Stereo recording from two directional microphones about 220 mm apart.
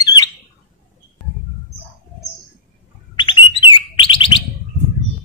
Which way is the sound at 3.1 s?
20° left (ahead or behind).